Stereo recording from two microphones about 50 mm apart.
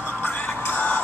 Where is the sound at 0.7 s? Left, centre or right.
Left.